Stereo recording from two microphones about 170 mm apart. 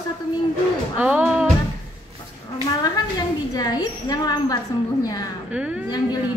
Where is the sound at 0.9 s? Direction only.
10° right (ahead or behind).